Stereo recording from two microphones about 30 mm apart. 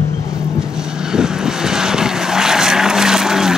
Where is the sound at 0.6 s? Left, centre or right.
Right.